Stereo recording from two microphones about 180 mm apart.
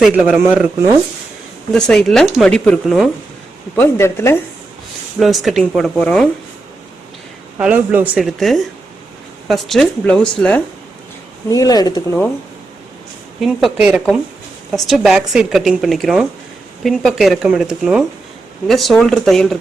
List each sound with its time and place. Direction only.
0.0 s a man's voice: 5° right (ahead or behind)
1.7 s speech: 5° left (ahead or behind)
3.8 s speech: 15° left (ahead or behind)
5.2 s speech: centre (ahead or behind)
7.6 s speech: 10° right (ahead or behind)
11.4 s speech: 20° left (ahead or behind)
13.4 s speech: centre (ahead or behind)